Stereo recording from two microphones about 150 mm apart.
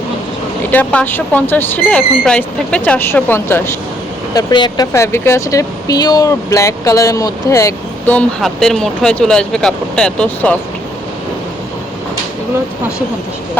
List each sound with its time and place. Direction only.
0.7 s speech: 10° left (ahead or behind)
4.4 s speech: 25° left (ahead or behind)
4.9 s speech: 15° left (ahead or behind)